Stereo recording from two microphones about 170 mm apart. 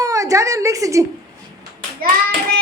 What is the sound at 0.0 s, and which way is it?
A woman's voice, 20° right (ahead or behind).